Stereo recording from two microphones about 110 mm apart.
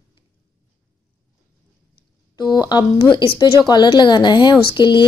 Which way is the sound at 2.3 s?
40° left (ahead or behind).